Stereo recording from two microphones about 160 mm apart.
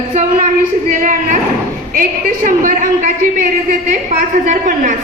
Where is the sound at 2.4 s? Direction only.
55° right (ahead or behind).